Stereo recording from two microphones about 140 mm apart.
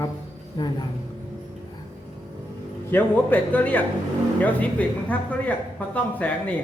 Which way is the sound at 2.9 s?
15° left (ahead or behind).